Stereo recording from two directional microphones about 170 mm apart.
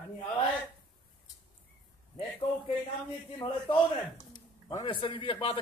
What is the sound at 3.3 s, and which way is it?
A man's voice, 25° left (ahead or behind).